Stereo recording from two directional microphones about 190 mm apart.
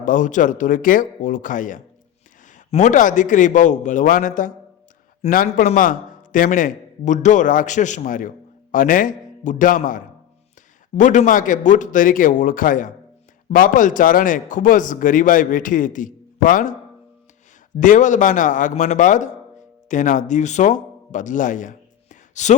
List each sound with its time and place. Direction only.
0.0 s a man's voice: 45° left (ahead or behind)
17.7 s a man's voice: 40° left (ahead or behind)